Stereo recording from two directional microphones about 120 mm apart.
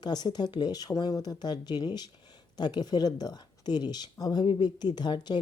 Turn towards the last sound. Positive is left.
turn(degrees=40)  # may be behind; listen again after turning